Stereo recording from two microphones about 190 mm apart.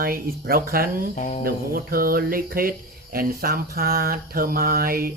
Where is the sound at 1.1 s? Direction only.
40° left (ahead or behind).